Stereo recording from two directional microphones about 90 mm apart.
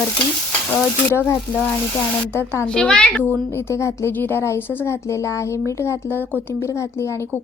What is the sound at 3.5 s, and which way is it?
Speech, 30° left (ahead or behind).